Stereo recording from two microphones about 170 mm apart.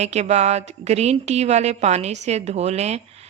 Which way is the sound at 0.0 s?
40° right (ahead or behind).